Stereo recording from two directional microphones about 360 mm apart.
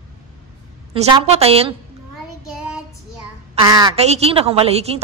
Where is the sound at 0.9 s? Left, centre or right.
Centre.